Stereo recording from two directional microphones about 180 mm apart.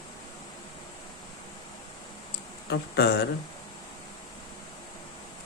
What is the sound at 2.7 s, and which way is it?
Speech, 65° left (ahead or behind).